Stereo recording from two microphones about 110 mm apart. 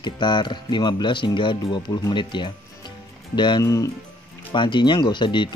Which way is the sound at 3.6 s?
30° left (ahead or behind).